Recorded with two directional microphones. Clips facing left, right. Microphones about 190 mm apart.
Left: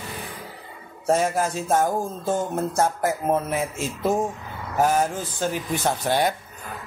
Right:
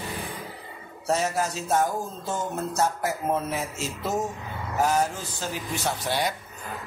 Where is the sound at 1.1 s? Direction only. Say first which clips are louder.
Left 4 dB; 50° left (ahead or behind).